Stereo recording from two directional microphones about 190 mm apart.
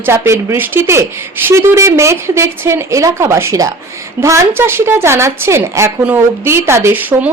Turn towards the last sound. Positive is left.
turn(degrees=-10)  # may be behind; listen again after turning